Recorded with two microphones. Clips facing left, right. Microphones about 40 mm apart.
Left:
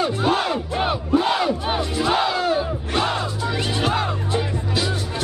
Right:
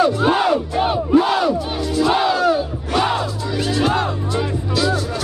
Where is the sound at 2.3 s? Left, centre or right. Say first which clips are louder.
Right 4 dB; left.